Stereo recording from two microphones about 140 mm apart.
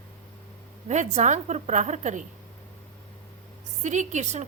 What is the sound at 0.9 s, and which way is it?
A woman's voice, 55° right (ahead or behind).